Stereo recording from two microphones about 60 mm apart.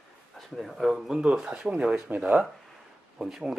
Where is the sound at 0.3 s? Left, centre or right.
Centre; by 2.5 s right.